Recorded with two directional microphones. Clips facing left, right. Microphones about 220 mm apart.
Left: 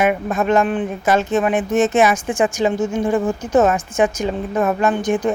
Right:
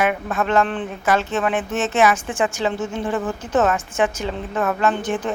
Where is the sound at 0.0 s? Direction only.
15° left (ahead or behind).